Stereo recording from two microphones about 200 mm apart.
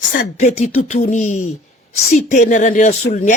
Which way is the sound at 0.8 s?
35° left (ahead or behind).